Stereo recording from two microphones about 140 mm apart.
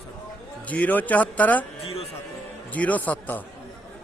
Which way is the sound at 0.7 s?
10° left (ahead or behind).